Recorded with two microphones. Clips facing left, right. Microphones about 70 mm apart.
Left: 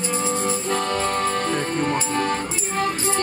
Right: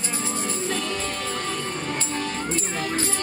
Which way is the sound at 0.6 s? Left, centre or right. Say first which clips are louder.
Left 5 dB; left.